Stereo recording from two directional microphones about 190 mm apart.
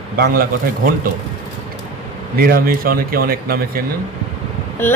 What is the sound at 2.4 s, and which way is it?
Speech, 50° right (ahead or behind).